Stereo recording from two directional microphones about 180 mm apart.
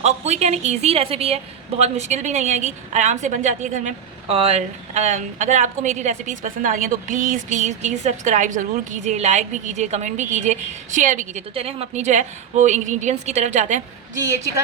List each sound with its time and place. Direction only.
0.0 s a woman's voice: 40° right (ahead or behind)
11.5 s a woman's voice: 35° right (ahead or behind)